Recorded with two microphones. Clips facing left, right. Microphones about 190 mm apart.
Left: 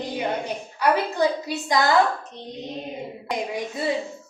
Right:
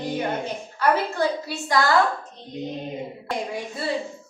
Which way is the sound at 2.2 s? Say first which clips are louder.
Left 3 dB; 75° left (ahead or behind).